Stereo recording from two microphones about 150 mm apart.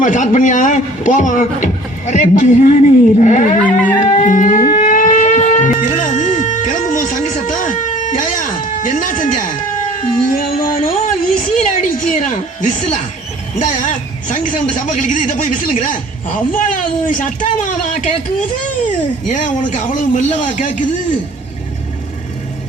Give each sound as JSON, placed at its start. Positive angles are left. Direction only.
{"t": 0.0, "sound": "speech", "side_deg": 55}
{"t": 3.6, "sound": "a sound", "side_deg": 10}
{"t": 4.2, "sound": "civil defense siren", "side_deg": 55}
{"t": 4.8, "sound": "a sound", "side_deg": 60}
{"t": 10.2, "sound": "speech", "side_deg": 65}
{"t": 14.3, "sound": "speech", "side_deg": 60}